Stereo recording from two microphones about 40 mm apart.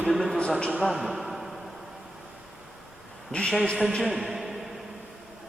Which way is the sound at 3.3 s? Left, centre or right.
Left.